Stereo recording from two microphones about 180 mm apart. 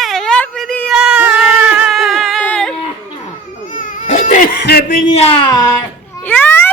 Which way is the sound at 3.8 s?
40° left (ahead or behind).